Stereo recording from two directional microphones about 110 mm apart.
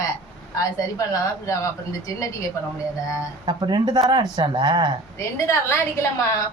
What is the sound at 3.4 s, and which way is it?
Speech, 40° right (ahead or behind).